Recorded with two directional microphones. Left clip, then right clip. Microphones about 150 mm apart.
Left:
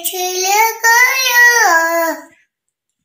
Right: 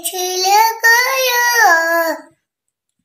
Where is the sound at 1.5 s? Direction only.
55° right (ahead or behind).